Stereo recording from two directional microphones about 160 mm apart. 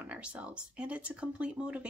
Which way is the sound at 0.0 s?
10° right (ahead or behind).